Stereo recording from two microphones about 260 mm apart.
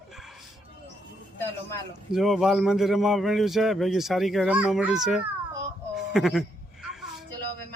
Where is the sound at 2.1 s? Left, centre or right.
Centre.